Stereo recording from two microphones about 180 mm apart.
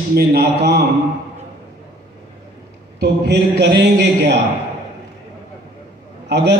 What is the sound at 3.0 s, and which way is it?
A man's voice, 70° right (ahead or behind).